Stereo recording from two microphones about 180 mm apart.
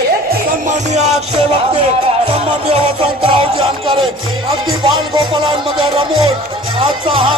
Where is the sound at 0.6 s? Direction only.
40° right (ahead or behind).